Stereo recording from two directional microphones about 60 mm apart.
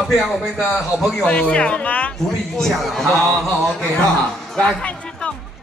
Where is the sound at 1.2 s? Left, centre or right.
Centre.